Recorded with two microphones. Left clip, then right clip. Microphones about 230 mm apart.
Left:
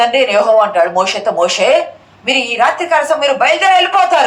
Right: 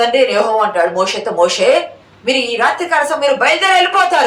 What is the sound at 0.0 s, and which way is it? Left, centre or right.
A woman's voice, centre.